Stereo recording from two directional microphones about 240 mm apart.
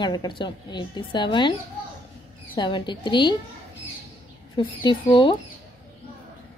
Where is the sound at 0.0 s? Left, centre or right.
Centre.